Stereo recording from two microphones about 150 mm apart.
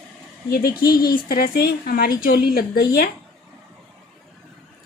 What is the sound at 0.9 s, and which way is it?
Speech, 75° left (ahead or behind).